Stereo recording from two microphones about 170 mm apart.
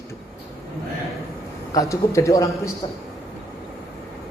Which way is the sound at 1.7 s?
20° left (ahead or behind).